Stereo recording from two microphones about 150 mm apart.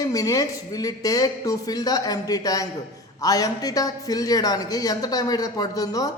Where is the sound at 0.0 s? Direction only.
25° left (ahead or behind).